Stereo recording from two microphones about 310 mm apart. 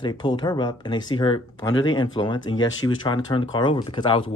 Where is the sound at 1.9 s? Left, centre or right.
Centre.